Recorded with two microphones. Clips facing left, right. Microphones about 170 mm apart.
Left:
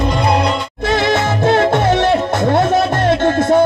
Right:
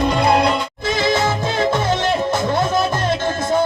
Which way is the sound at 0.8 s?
65° left (ahead or behind).